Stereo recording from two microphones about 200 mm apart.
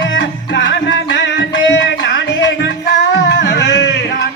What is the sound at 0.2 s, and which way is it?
Music, 65° left (ahead or behind).